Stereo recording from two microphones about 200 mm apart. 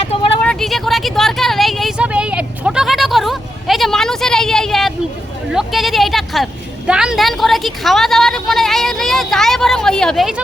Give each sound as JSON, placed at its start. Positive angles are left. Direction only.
{"t": 0.0, "sound": "vehicle", "side_deg": 30}
{"t": 0.4, "sound": "a sound", "side_deg": 0}
{"t": 5.5, "sound": "a woman's voice", "side_deg": 0}